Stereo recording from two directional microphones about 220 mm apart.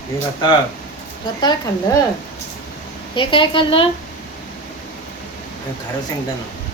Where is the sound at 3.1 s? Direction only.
20° left (ahead or behind).